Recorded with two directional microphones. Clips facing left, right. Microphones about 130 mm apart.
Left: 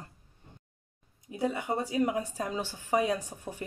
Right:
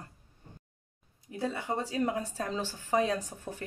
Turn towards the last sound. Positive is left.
turn(degrees=15)  # may be behind; listen again after turning